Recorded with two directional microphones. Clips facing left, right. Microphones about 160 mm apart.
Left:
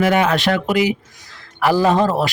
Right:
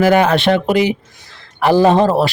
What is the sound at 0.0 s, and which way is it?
A man's voice, 40° right (ahead or behind).